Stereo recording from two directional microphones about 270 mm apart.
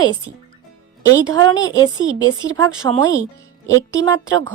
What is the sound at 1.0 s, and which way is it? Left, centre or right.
Speech, right.